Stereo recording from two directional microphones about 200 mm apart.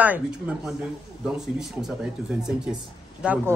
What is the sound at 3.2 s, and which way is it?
Speech, 5° right (ahead or behind).